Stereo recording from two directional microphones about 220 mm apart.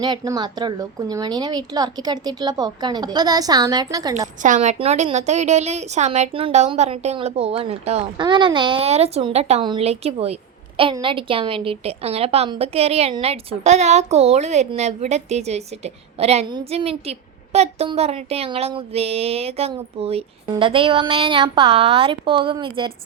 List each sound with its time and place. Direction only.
0.0 s a woman's voice: 20° right (ahead or behind)
4.4 s a woman's voice: 35° right (ahead or behind)